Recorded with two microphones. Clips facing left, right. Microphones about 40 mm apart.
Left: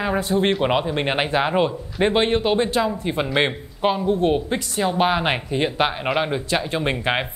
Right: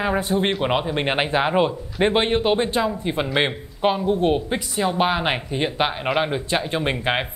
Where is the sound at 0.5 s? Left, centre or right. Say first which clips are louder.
Left 2 dB; centre.